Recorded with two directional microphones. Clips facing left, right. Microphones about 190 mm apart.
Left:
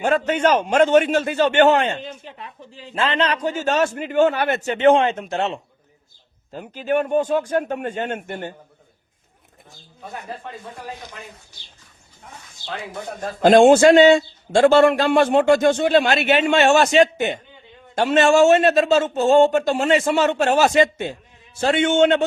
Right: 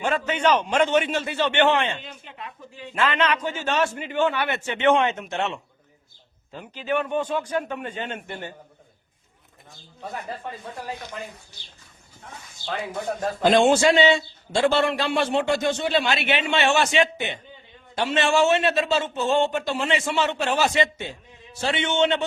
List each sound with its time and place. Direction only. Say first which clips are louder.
0.0 s a man's voice: left 5 dB; 45° left (ahead or behind)
6.5 s a man's voice: left 5 dB; 45° left (ahead or behind)
13.4 s a man's voice: left 7 dB; 50° left (ahead or behind)